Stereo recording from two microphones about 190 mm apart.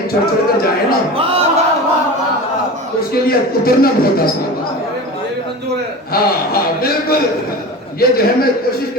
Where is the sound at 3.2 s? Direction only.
50° left (ahead or behind).